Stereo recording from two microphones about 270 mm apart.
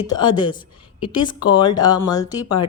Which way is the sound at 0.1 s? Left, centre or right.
Centre.